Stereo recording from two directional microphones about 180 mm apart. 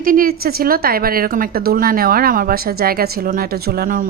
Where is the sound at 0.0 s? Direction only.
50° right (ahead or behind).